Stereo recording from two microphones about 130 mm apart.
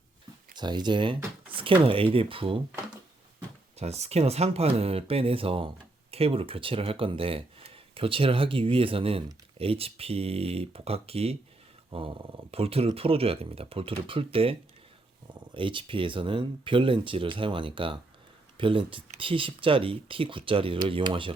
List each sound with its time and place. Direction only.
0.5 s speech: 35° right (ahead or behind)
3.8 s speech: 55° right (ahead or behind)
15.5 s speech: 40° right (ahead or behind)